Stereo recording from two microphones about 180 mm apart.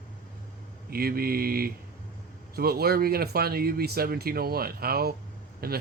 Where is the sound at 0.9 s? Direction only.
55° right (ahead or behind).